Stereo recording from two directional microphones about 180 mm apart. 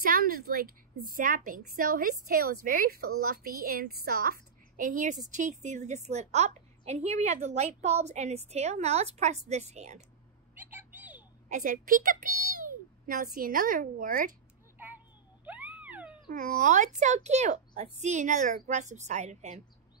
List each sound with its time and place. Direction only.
0.0 s a woman's voice: 55° right (ahead or behind)
10.5 s cat: 10° right (ahead or behind)
11.4 s a child's voice: 45° right (ahead or behind)
15.4 s cat: 10° right (ahead or behind)
16.3 s a woman's voice: 45° right (ahead or behind)